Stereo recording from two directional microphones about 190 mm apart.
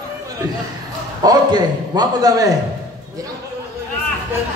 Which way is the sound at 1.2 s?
20° right (ahead or behind).